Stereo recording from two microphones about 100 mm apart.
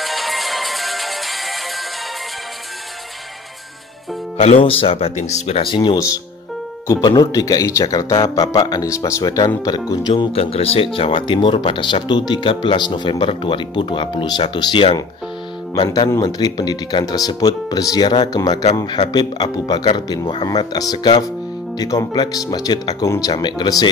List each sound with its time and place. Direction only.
0.0 s music: centre (ahead or behind)
4.4 s speech: 70° left (ahead or behind)
5.9 s speech: 35° left (ahead or behind)
8.8 s speech: 30° left (ahead or behind)
9.2 s speech: 45° left (ahead or behind)
10.3 s speech: 75° left (ahead or behind); by 15.0 s 55° left (ahead or behind)
16.2 s speech: 45° left (ahead or behind)